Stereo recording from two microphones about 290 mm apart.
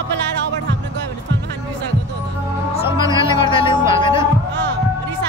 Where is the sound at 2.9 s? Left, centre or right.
Centre.